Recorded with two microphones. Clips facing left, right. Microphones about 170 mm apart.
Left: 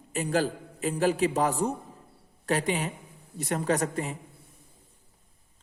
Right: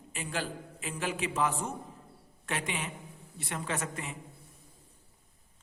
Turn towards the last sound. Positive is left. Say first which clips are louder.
# left 9 dB
turn(degrees=35)  # may be behind; listen again after turning